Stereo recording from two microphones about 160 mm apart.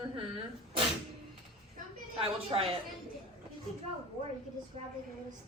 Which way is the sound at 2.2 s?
35° right (ahead or behind).